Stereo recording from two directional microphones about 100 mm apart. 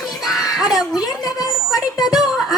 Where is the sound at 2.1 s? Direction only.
Centre (ahead or behind).